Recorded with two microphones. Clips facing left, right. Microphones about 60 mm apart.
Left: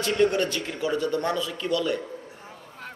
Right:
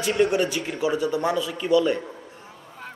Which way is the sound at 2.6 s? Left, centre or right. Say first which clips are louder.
Right 3 dB; centre.